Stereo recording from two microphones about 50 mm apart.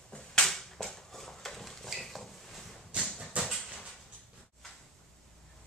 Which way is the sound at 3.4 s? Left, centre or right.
Right.